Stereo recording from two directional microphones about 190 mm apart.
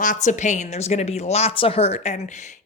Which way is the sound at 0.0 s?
40° left (ahead or behind).